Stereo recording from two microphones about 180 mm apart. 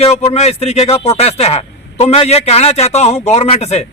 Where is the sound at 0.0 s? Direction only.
35° left (ahead or behind).